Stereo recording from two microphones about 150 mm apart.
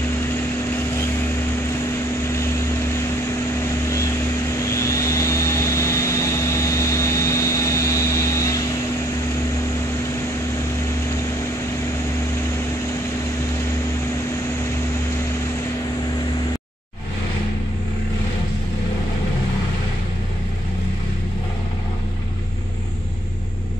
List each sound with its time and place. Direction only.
3.6 s vehicle: 20° left (ahead or behind)